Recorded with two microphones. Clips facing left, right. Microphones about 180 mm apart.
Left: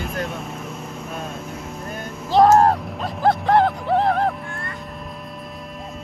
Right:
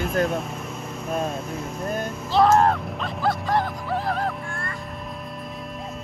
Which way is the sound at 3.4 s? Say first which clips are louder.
Left 7 dB; 60° left (ahead or behind).